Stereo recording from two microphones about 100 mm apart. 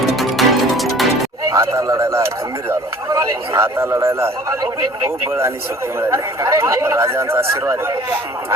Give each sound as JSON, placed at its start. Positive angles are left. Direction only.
{"t": 0.2, "sound": "music", "side_deg": 0}
{"t": 1.5, "sound": "speech", "side_deg": -30}
{"t": 6.0, "sound": "speech", "side_deg": -30}